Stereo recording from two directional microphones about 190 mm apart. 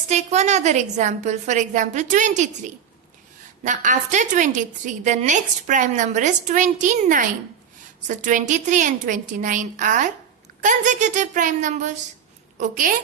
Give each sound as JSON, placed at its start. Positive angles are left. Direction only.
{"t": 0.1, "sound": "a woman's voice", "side_deg": -35}